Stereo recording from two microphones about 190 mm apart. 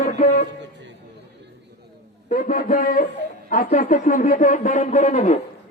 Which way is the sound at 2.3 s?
45° left (ahead or behind).